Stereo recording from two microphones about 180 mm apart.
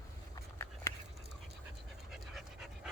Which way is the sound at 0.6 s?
15° left (ahead or behind).